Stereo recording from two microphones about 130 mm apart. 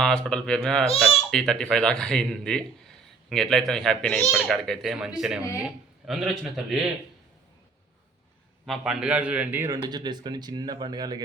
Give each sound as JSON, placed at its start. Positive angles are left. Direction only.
{"t": 0.0, "sound": "a man's voice", "side_deg": 5}
{"t": 8.6, "sound": "a man's voice", "side_deg": 0}
{"t": 9.6, "sound": "speech", "side_deg": -30}